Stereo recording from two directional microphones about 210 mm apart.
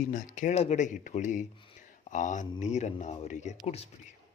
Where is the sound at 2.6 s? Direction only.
35° left (ahead or behind).